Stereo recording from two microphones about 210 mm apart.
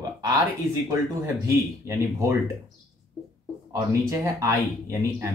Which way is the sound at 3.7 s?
15° right (ahead or behind).